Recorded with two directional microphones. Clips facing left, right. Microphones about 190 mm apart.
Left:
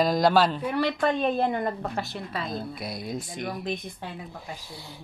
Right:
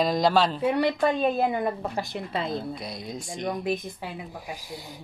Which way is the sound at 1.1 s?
5° right (ahead or behind).